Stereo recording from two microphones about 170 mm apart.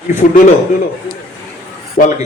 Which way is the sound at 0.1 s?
45° left (ahead or behind).